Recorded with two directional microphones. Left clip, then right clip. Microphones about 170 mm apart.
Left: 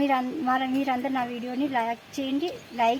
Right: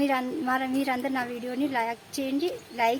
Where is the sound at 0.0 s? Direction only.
Centre (ahead or behind).